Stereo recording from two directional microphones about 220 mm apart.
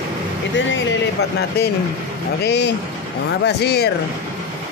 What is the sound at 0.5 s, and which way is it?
Speech, 55° left (ahead or behind).